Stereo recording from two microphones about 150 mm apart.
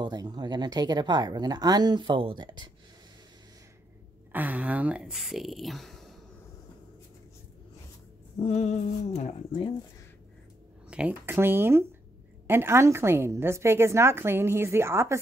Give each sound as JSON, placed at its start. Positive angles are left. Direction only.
{"t": 0.0, "sound": "speech", "side_deg": -25}
{"t": 4.3, "sound": "speech", "side_deg": -10}
{"t": 8.4, "sound": "a sound", "side_deg": 45}
{"t": 9.5, "sound": "speech", "side_deg": 35}
{"t": 10.9, "sound": "a woman's voice", "side_deg": -10}